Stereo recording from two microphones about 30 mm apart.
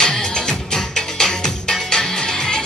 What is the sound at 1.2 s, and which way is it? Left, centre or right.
Music, left.